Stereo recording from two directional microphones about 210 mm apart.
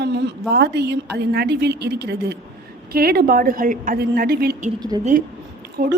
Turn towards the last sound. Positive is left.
turn(degrees=-40)  # may be behind; listen again after turning